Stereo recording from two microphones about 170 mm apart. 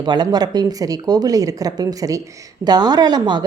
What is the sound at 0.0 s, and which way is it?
Speech, 25° right (ahead or behind).